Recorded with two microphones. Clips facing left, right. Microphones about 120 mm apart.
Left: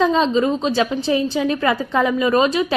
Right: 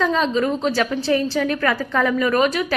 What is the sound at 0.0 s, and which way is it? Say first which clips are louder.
A woman's voice: left 3 dB; 25° left (ahead or behind).